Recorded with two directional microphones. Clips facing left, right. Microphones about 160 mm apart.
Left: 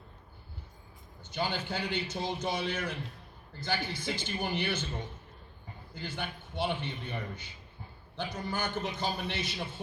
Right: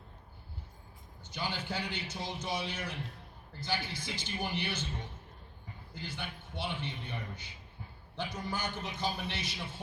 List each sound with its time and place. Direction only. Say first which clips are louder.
1.2 s a man's voice: left 5 dB; 55° left (ahead or behind)
6.0 s a man's voice: left 4 dB; 50° left (ahead or behind)